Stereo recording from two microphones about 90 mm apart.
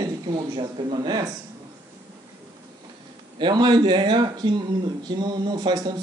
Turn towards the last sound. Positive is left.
turn(degrees=-55)  # may be behind; listen again after turning